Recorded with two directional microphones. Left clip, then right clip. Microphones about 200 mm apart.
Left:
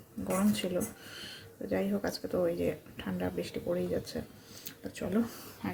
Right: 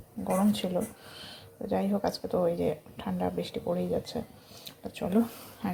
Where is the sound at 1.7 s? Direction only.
5° right (ahead or behind).